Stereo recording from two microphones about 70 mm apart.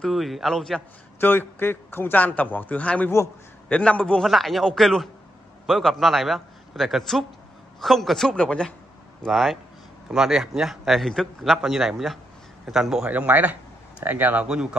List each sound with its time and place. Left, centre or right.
0.0 s a man's voice: centre
1.2 s speech: left
4.2 s a man's voice: centre
13.1 s speech: right
14.5 s a man's voice: centre